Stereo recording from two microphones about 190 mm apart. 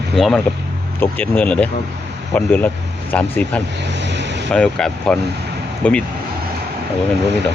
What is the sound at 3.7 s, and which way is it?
Vehicle, 65° right (ahead or behind).